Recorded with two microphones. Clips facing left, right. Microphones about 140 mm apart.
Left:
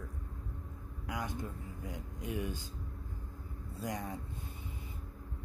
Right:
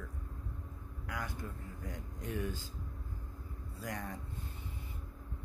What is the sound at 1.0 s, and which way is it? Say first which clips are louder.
Speech: left 3 dB; 20° left (ahead or behind).